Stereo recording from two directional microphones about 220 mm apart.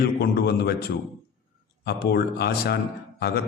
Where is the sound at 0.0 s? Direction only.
45° left (ahead or behind).